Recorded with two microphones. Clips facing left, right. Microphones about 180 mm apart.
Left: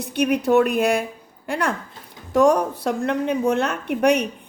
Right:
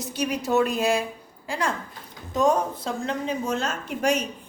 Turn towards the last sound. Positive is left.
turn(degrees=65)  # may be behind; listen again after turning